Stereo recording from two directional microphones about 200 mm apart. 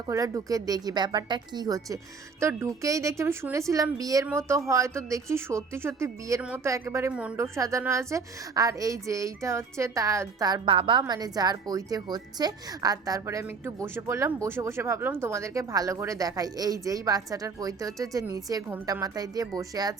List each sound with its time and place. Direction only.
0.1 s speech: 15° right (ahead or behind)